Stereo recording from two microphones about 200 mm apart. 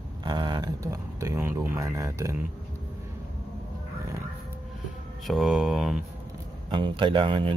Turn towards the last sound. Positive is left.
turn(degrees=-25)  # may be behind; listen again after turning